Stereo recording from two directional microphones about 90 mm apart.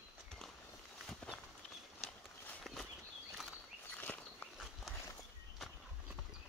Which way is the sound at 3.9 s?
20° left (ahead or behind).